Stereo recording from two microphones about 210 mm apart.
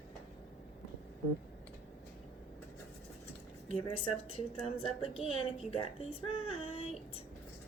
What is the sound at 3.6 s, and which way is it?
A woman's voice, 25° left (ahead or behind).